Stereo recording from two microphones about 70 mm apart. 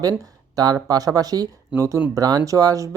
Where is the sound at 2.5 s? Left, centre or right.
Right.